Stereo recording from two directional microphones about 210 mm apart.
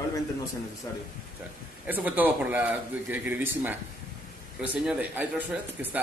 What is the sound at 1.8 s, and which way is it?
Speech, 10° right (ahead or behind).